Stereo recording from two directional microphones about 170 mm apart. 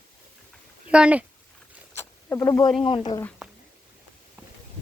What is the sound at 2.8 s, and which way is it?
Speech, 30° left (ahead or behind).